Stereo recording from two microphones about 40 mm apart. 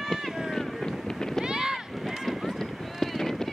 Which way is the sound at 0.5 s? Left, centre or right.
Centre.